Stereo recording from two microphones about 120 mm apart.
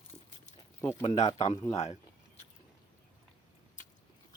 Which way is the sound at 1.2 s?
60° left (ahead or behind).